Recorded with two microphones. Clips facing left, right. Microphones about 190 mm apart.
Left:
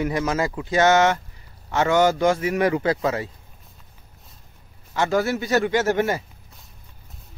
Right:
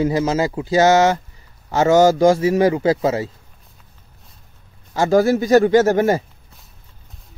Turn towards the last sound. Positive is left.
turn(degrees=-40)  # may be behind; listen again after turning